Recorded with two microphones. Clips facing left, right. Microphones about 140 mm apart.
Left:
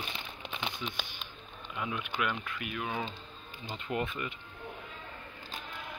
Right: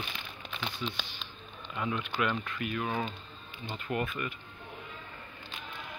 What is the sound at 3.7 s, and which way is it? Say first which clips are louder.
Speech: right 1 dB; 25° left (ahead or behind).